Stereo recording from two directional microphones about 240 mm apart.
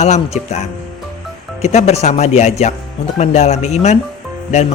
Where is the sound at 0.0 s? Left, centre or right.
Left.